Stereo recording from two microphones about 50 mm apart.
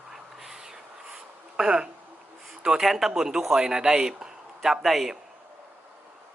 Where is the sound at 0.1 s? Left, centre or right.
Centre.